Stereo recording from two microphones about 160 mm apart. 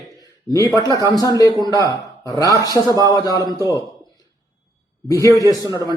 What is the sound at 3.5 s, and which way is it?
Speech, 20° right (ahead or behind).